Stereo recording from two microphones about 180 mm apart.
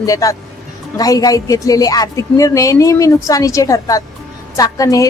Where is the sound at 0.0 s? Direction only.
20° left (ahead or behind).